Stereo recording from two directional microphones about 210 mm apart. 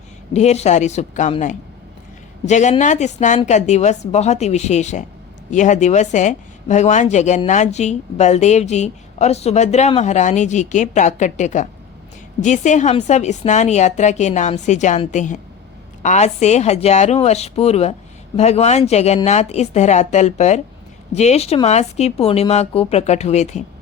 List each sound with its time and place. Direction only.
0.3 s speech: 30° left (ahead or behind)